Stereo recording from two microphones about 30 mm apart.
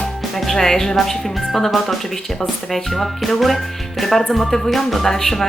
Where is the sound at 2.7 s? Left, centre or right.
Centre.